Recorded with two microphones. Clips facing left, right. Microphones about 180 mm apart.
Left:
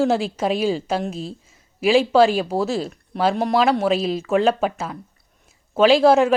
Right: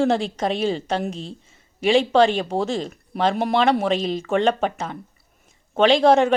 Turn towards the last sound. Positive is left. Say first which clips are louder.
# left 1 dB
turn(degrees=5)  # may be behind; listen again after turning